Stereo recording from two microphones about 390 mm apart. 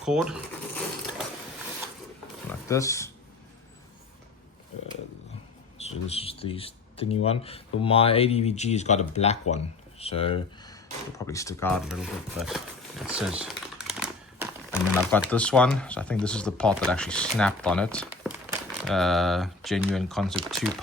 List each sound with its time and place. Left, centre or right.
0.0 s speech: centre
2.5 s roaring cats: centre
5.8 s speech: centre
13.8 s typewriter: centre
14.7 s speech: centre